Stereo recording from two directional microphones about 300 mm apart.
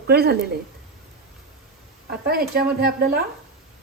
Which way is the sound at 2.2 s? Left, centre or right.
Right.